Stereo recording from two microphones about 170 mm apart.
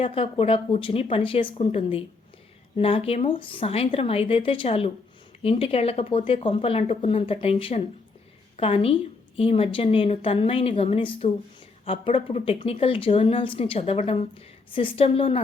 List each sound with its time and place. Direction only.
0.0 s a woman's voice: 35° left (ahead or behind)